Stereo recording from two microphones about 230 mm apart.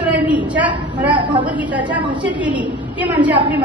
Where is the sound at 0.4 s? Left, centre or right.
Centre.